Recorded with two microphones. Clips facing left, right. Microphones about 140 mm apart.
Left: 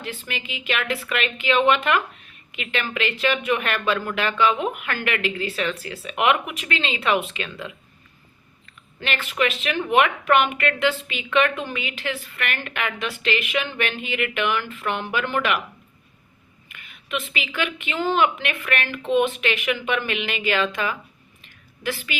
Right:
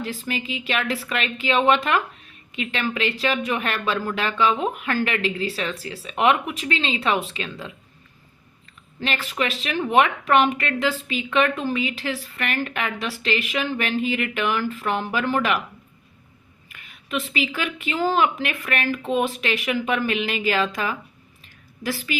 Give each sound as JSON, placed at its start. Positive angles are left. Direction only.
{"t": 0.0, "sound": "a woman's voice", "side_deg": -35}
{"t": 3.8, "sound": "speech", "side_deg": 0}
{"t": 4.1, "sound": "a woman's voice", "side_deg": -35}
{"t": 9.0, "sound": "a woman's voice", "side_deg": -35}
{"t": 16.6, "sound": "a woman's voice", "side_deg": -35}
{"t": 21.4, "sound": "a sound", "side_deg": -35}